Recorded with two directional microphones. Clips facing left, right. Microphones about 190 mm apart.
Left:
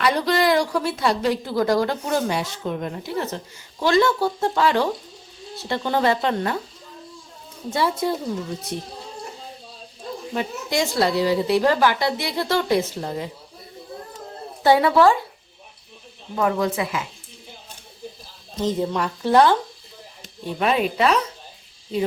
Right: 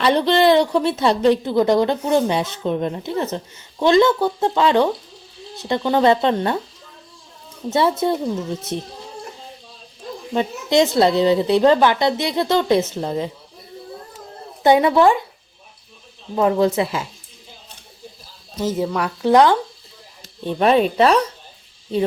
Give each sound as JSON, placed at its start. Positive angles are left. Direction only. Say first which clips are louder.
{"t": 0.0, "sound": "a woman's voice", "louder": "right 5 dB", "side_deg": -25}
{"t": 7.7, "sound": "a woman's voice", "louder": "right 4 dB", "side_deg": -25}
{"t": 10.3, "sound": "a woman's voice", "louder": "right 8 dB", "side_deg": -20}
{"t": 14.6, "sound": "a woman's voice", "louder": "right 2 dB", "side_deg": -20}
{"t": 16.3, "sound": "a woman's voice", "louder": "right 5 dB", "side_deg": -25}
{"t": 18.6, "sound": "speech", "louder": "right 1 dB", "side_deg": -5}
{"t": 20.6, "sound": "a woman's voice", "louder": "right 6 dB", "side_deg": -35}